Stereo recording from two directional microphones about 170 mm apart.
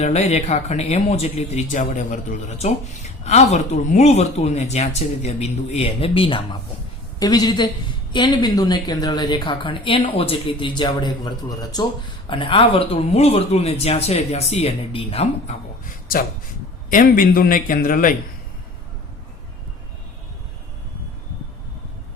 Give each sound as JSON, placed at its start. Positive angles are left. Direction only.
{"t": 0.0, "sound": "speech", "side_deg": 40}
{"t": 16.9, "sound": "a man's voice", "side_deg": 55}